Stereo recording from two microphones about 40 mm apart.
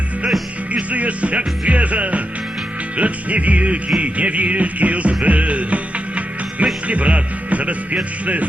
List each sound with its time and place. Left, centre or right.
0.7 s music: right